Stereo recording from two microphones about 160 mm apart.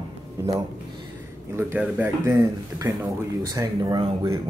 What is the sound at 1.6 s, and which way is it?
Speech, 15° right (ahead or behind).